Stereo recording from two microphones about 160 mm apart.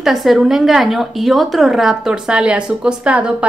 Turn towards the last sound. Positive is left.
turn(degrees=-5)  # may be behind; listen again after turning